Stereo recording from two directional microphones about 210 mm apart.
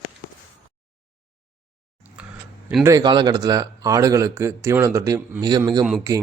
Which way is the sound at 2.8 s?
15° right (ahead or behind).